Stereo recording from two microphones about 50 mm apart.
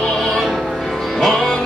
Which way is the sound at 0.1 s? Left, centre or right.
Centre.